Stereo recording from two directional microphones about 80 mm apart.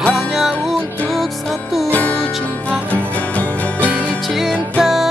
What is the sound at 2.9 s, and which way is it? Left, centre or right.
Music, centre.